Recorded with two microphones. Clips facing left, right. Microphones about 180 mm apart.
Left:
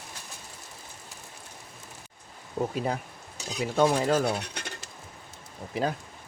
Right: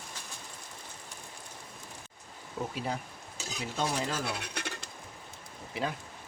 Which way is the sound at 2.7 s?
55° left (ahead or behind).